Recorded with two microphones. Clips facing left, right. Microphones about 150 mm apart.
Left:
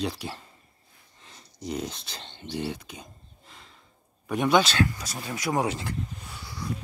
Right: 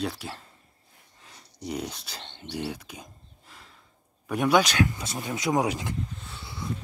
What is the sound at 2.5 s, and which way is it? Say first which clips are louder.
Bird: left 1 dB; 10° right (ahead or behind).